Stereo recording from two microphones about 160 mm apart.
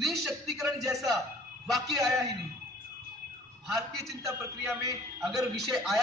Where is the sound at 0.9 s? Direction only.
20° right (ahead or behind).